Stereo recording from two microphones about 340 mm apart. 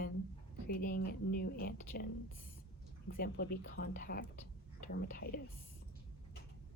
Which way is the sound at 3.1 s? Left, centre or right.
Left.